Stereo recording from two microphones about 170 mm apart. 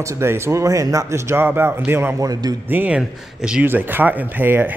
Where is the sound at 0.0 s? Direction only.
15° right (ahead or behind).